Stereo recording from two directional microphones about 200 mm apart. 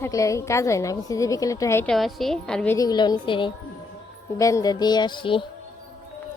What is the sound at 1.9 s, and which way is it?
Speech, centre (ahead or behind).